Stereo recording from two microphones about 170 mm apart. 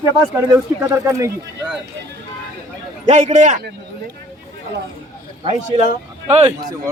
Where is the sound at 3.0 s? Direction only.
45° right (ahead or behind).